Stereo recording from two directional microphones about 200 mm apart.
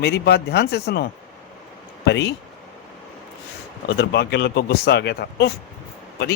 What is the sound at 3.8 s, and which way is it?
Speech, 60° left (ahead or behind).